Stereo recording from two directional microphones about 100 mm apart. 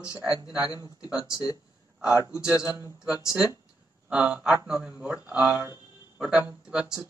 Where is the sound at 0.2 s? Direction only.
5° right (ahead or behind).